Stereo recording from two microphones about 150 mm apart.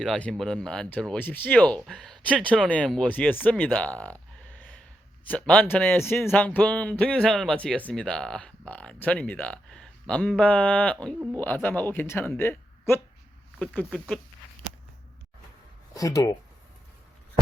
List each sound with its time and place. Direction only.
0.0 s speech: 5° left (ahead or behind)
16.0 s speech: 20° left (ahead or behind)